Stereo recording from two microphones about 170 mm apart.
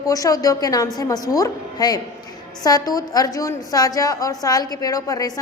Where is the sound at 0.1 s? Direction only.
20° left (ahead or behind).